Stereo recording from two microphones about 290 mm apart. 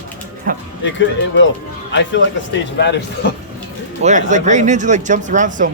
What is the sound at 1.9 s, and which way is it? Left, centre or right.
Speech, left.